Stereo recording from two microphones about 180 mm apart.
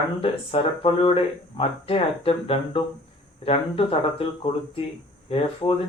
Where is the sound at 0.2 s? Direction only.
30° left (ahead or behind).